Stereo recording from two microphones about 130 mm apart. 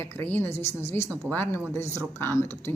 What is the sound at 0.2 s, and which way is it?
A man's voice, 15° left (ahead or behind).